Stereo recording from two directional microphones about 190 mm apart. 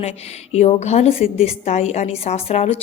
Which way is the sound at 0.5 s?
35° left (ahead or behind).